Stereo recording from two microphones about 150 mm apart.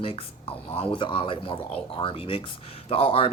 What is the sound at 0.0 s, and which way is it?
Speech, 35° left (ahead or behind).